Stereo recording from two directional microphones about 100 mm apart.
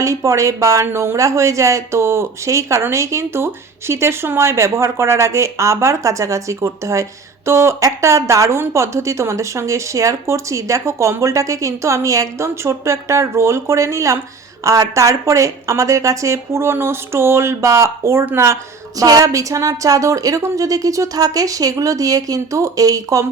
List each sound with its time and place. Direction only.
0.0 s speech: 30° right (ahead or behind)